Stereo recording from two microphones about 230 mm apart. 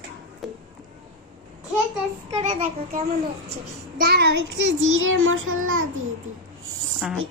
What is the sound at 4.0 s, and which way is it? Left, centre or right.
Child singing, right.